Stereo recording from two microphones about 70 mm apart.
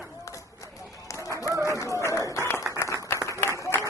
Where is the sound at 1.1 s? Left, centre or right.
Left.